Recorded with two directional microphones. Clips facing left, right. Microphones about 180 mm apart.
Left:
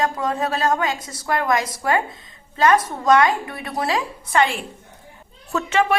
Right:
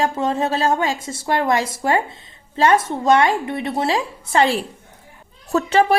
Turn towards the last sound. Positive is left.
turn(degrees=-35)  # may be behind; listen again after turning